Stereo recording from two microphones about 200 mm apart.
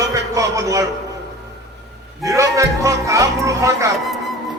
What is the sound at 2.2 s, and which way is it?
Music, 15° right (ahead or behind).